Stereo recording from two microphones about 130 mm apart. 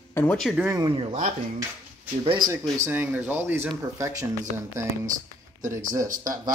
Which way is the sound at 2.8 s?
15° right (ahead or behind).